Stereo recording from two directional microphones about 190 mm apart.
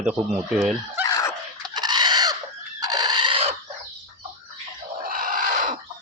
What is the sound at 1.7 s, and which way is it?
Chicken, 20° right (ahead or behind).